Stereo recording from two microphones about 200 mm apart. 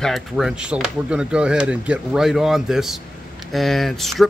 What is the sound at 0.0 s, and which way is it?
Speech, centre (ahead or behind).